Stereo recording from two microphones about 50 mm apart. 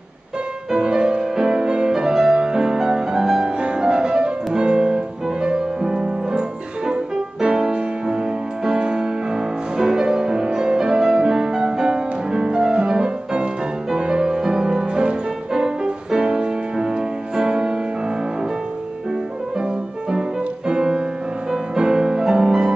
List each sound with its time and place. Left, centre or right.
0.7 s music: centre
19.6 s music: centre